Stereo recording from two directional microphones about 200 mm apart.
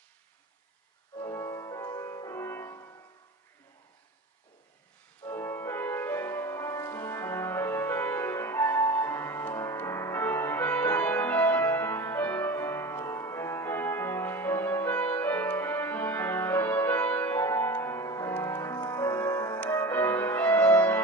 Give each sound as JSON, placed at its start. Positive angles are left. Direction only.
{"t": 1.2, "sound": "music", "side_deg": 15}
{"t": 5.2, "sound": "music", "side_deg": 15}